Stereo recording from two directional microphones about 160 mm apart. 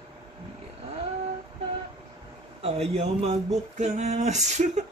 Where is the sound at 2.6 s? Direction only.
40° right (ahead or behind).